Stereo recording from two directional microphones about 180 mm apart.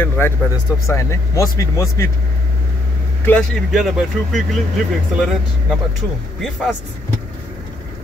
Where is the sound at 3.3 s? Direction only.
5° left (ahead or behind).